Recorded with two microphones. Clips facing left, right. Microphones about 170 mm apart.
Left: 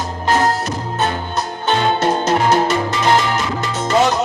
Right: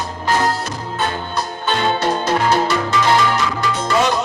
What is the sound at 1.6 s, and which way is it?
Music, 20° left (ahead or behind).